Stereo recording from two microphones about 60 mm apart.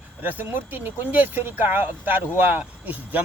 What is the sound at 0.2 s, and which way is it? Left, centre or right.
Speech, right.